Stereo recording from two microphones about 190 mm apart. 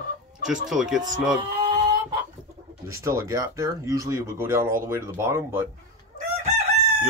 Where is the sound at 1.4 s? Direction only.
25° right (ahead or behind).